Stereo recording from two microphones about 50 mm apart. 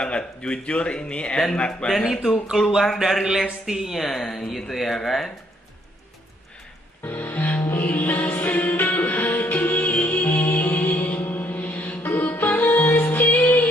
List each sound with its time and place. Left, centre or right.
0.0 s speech: centre
2.8 s speech: centre
7.0 s music: left